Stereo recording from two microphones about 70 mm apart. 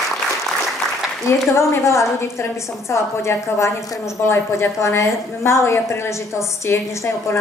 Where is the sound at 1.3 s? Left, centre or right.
Left.